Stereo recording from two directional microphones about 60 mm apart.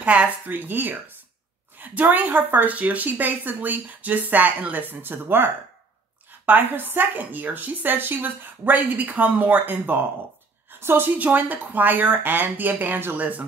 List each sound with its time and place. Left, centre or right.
0.0 s speech: right
0.5 s a woman's voice: right
11.1 s speech: right